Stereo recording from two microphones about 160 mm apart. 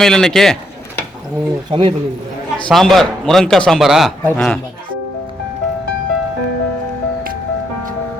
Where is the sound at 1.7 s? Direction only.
30° right (ahead or behind).